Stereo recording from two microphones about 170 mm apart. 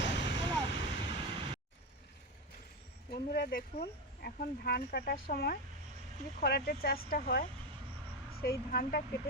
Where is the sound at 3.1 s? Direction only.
65° left (ahead or behind).